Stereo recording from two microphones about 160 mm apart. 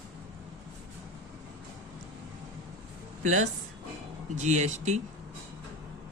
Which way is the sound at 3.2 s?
50° right (ahead or behind).